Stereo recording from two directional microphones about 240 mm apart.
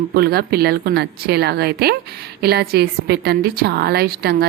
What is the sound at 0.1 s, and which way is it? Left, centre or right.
A woman's voice, right.